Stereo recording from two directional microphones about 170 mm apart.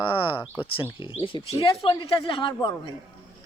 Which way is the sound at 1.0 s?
30° left (ahead or behind).